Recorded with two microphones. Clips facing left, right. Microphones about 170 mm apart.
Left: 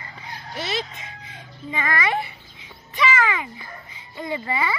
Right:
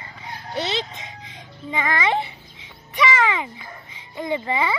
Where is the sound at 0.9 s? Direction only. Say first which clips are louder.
Right 2 dB; 20° right (ahead or behind).